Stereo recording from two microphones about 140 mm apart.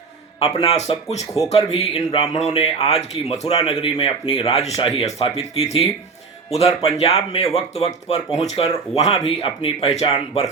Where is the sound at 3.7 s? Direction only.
40° left (ahead or behind).